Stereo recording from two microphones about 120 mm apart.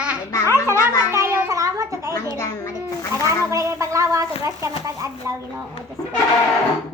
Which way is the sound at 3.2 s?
25° right (ahead or behind).